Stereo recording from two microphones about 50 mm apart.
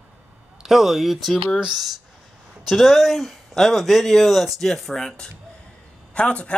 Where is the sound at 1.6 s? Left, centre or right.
Centre.